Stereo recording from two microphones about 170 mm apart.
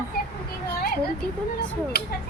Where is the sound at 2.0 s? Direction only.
70° left (ahead or behind).